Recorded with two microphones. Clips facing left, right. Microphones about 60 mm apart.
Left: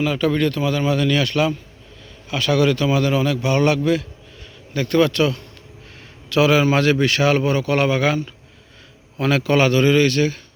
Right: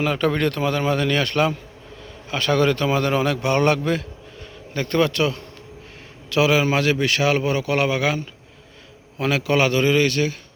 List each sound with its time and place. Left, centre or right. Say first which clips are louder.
0.0 s a man's voice: left 1 dB; right
4.7 s a man's voice: left 3 dB; right